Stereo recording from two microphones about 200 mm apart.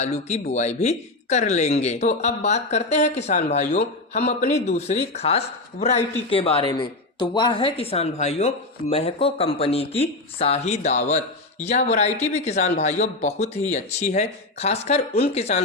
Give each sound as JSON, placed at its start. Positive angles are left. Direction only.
{"t": 0.0, "sound": "speech", "side_deg": 35}